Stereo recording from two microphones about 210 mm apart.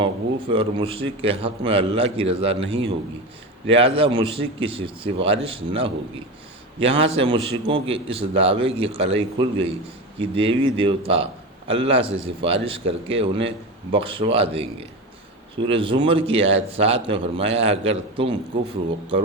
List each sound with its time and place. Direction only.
0.0 s a man's voice: 25° right (ahead or behind)